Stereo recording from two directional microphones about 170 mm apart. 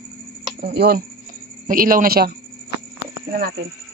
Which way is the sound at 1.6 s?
55° right (ahead or behind).